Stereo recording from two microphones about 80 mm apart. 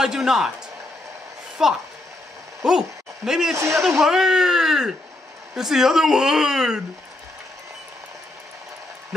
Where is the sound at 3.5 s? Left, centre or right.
Right.